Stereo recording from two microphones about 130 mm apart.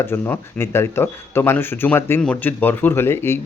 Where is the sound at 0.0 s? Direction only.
20° left (ahead or behind).